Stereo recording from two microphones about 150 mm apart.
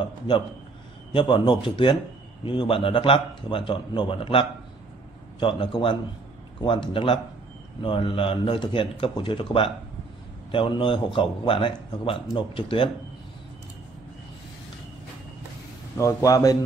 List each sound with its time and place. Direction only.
1.1 s a man's voice: 30° left (ahead or behind)
16.0 s a man's voice: 20° left (ahead or behind)